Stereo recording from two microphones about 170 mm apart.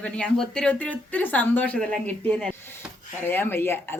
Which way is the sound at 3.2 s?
10° left (ahead or behind).